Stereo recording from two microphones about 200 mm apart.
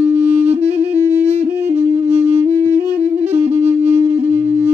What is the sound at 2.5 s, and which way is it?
Music, 15° right (ahead or behind).